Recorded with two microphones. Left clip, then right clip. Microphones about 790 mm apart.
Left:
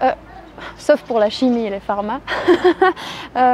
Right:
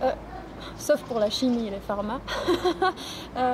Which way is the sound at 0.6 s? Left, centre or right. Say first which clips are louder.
Left 9 dB; left.